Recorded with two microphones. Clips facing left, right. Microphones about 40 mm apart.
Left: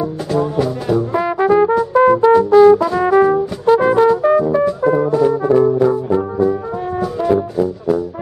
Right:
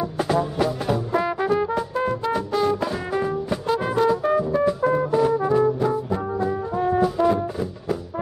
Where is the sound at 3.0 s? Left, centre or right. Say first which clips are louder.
Left 13 dB; left.